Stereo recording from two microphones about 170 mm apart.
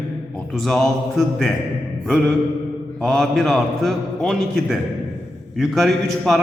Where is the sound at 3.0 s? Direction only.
Centre (ahead or behind).